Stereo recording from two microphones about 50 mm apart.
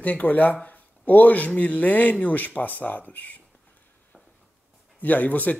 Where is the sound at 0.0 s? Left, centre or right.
Left.